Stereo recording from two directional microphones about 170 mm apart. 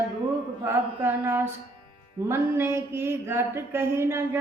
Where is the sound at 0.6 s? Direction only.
10° right (ahead or behind).